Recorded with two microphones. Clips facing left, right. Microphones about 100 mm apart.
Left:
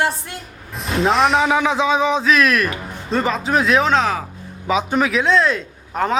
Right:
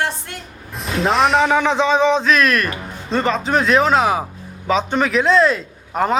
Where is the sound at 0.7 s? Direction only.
Centre (ahead or behind).